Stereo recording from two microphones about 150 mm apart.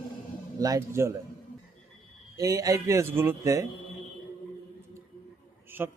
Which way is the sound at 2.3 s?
25° right (ahead or behind).